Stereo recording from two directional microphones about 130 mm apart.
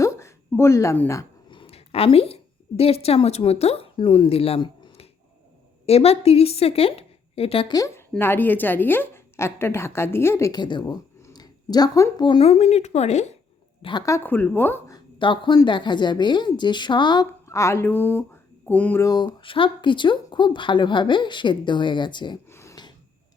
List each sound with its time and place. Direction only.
0.0 s a sound: 20° left (ahead or behind)
1.5 s a woman's voice: 45° left (ahead or behind)
7.7 s a woman's voice: 25° left (ahead or behind)
10.5 s speech: 35° left (ahead or behind)
12.2 s speech: 45° left (ahead or behind); by 13.2 s 60° left (ahead or behind)
14.0 s a woman's voice: 20° left (ahead or behind)
14.9 s speech: 40° left (ahead or behind)
17.5 s a woman's voice: 20° left (ahead or behind)
19.0 s speech: 30° left (ahead or behind)
22.5 s a sound: 20° left (ahead or behind)